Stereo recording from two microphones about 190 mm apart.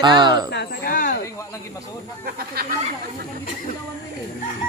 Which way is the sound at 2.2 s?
55° right (ahead or behind).